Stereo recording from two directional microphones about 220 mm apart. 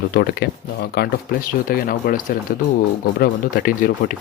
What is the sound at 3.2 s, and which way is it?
Speech, 40° left (ahead or behind).